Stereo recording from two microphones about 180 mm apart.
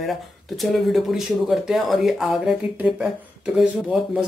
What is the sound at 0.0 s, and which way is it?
Speech, centre (ahead or behind).